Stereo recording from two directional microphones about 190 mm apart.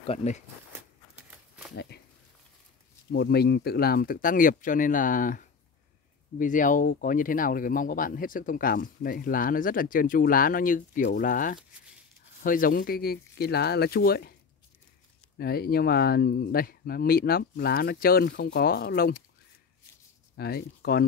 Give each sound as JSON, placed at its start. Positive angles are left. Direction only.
{"t": 0.0, "sound": "speech", "side_deg": 35}
{"t": 3.1, "sound": "speech", "side_deg": 60}
{"t": 15.3, "sound": "speech", "side_deg": 55}
{"t": 20.3, "sound": "speech", "side_deg": 55}